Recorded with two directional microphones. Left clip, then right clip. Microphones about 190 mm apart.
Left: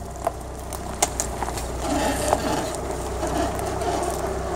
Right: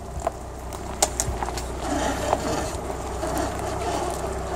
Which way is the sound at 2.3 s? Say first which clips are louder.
Left 2 dB; 60° left (ahead or behind).